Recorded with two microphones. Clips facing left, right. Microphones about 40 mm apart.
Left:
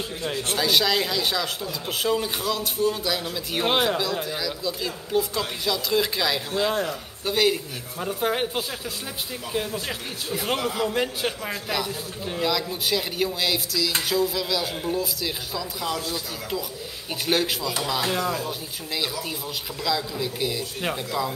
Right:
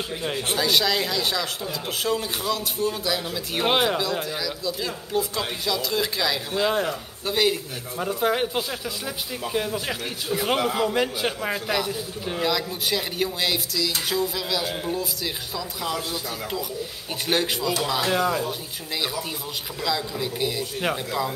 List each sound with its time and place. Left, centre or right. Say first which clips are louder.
0.2 s speech: even; centre
0.6 s speech: left 1 dB; centre
6.7 s a man's voice: right 2 dB; centre
7.2 s a man's voice: left 1 dB; centre
17.3 s a man's voice: right 1 dB; centre
19.8 s a man's voice: even; centre